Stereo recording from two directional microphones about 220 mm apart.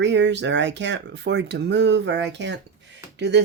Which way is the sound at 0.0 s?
55° right (ahead or behind).